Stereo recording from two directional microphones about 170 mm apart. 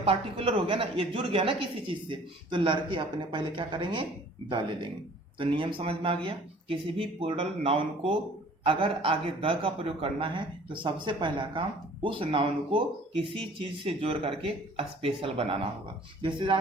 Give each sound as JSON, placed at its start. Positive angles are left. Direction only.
{"t": 0.0, "sound": "a woman's voice", "side_deg": -35}